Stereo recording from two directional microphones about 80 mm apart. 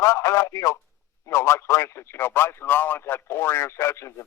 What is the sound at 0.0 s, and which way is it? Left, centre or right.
Speech, left.